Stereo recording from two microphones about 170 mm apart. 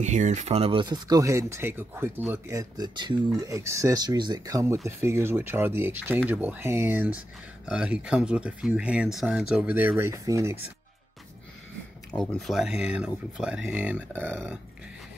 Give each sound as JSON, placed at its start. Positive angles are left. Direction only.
{"t": 0.0, "sound": "speech", "side_deg": -45}
{"t": 12.1, "sound": "speech", "side_deg": 5}